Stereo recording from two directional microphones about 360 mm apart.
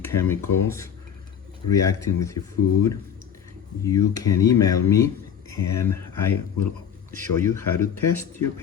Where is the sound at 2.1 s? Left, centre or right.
Left.